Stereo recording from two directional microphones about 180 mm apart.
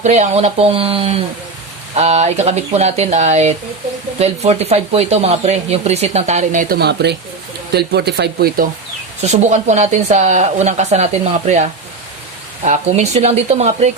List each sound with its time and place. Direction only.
0.0 s speech: 40° right (ahead or behind); by 8.6 s 60° right (ahead or behind)
9.2 s speech: 40° right (ahead or behind)